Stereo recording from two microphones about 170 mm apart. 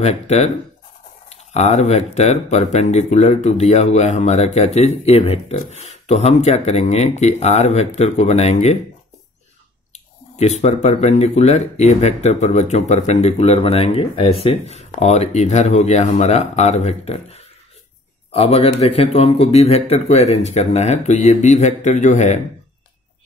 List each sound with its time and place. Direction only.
0.0 s speech: 40° left (ahead or behind)
9.9 s speech: 40° left (ahead or behind)